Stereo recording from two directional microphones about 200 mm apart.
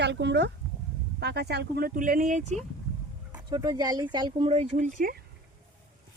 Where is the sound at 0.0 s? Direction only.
60° right (ahead or behind); by 2.6 s 35° right (ahead or behind).